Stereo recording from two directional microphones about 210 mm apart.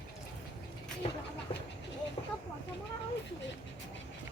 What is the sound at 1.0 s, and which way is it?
Speech, 30° left (ahead or behind).